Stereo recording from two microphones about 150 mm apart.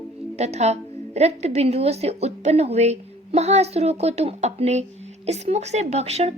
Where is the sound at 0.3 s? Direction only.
45° right (ahead or behind).